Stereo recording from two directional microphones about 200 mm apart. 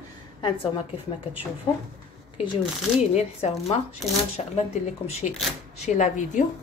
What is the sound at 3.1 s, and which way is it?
A woman's voice, 35° left (ahead or behind).